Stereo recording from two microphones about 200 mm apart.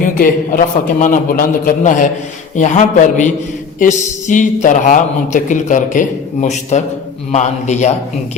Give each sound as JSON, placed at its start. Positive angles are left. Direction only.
{"t": 0.2, "sound": "a man's voice", "side_deg": 40}